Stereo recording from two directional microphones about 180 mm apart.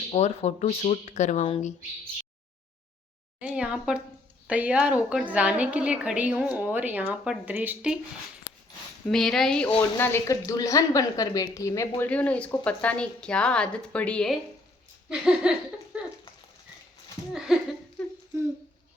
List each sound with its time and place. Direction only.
0.1 s speech: 35° left (ahead or behind)
3.4 s laughter: 5° right (ahead or behind)
4.4 s a woman's voice: 5° right (ahead or behind)
9.0 s laughter: centre (ahead or behind)
9.7 s a woman's voice: 10° left (ahead or behind)
15.1 s laughter: 5° right (ahead or behind)
17.3 s laughter: centre (ahead or behind)